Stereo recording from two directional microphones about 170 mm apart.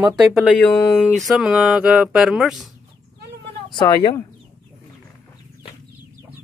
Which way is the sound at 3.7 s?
25° left (ahead or behind).